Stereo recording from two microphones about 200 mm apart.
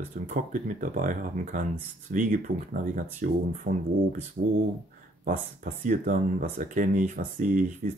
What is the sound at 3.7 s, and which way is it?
Speech, 55° right (ahead or behind).